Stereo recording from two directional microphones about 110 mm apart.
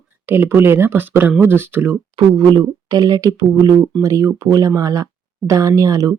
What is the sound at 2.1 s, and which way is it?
Speech, 40° right (ahead or behind).